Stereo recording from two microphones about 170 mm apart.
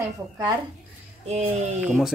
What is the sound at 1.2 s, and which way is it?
Speech, 40° right (ahead or behind).